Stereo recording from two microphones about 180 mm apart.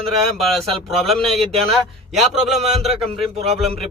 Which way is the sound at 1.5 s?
35° right (ahead or behind).